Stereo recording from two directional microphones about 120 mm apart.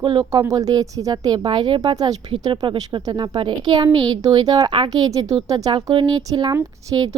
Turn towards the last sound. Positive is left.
turn(degrees=-30)  # may be behind; listen again after turning